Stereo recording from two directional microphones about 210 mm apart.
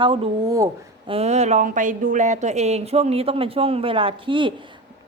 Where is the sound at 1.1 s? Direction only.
30° right (ahead or behind).